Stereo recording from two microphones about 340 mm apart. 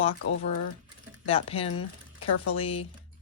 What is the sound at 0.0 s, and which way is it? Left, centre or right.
Speech, centre.